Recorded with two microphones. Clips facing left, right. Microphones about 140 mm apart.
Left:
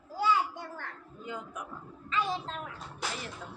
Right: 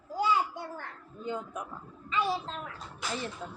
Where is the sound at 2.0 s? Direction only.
5° right (ahead or behind).